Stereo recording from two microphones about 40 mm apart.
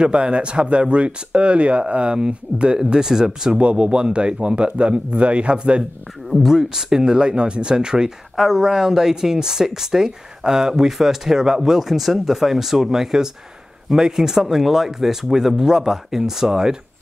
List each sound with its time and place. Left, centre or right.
0.0 s speech: right
3.5 s speech: right
6.3 s speech: centre